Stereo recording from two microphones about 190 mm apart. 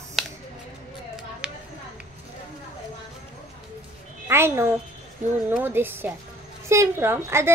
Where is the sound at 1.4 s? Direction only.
5° right (ahead or behind).